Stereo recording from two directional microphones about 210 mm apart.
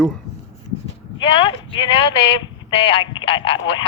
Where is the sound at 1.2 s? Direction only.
25° left (ahead or behind).